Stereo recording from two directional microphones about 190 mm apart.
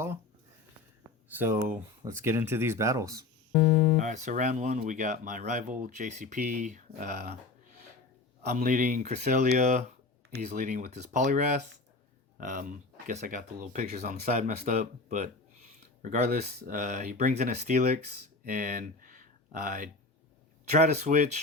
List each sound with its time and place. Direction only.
1.3 s speech: 10° right (ahead or behind)
3.5 s speech: 30° left (ahead or behind)
3.9 s speech: 40° right (ahead or behind)
8.4 s speech: 40° right (ahead or behind)